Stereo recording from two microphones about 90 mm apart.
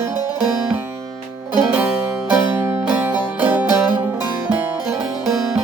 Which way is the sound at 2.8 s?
15° right (ahead or behind).